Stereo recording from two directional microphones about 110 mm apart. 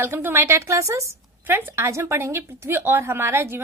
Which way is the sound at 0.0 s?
20° right (ahead or behind).